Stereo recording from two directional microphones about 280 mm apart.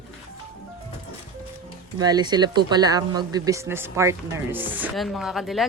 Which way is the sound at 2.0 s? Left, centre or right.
Centre.